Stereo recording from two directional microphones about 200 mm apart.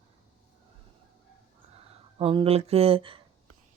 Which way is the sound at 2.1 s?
25° right (ahead or behind).